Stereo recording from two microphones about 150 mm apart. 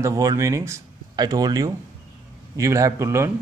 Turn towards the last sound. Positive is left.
turn(degrees=-20)  # may be behind; listen again after turning